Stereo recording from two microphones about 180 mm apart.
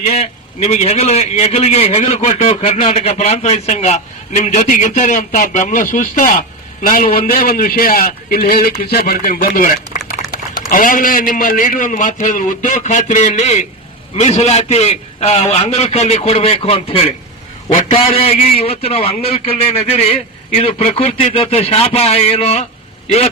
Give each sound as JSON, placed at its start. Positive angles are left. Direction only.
{"t": 0.0, "sound": "a man's voice", "side_deg": 40}